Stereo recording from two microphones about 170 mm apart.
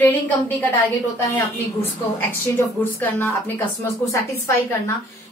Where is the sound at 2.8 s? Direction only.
10° left (ahead or behind).